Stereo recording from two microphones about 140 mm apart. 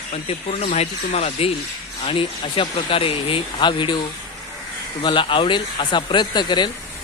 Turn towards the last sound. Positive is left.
turn(degrees=30)  # may be behind; listen again after turning